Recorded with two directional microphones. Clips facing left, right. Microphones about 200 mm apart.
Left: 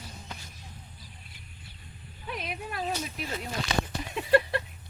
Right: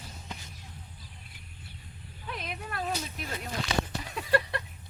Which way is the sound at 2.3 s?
10° left (ahead or behind).